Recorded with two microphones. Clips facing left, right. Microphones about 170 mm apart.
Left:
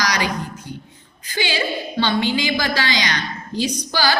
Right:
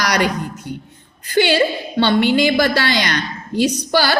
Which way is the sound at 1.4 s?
60° right (ahead or behind).